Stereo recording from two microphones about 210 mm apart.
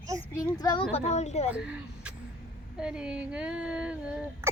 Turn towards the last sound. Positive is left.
turn(degrees=-5)  # may be behind; listen again after turning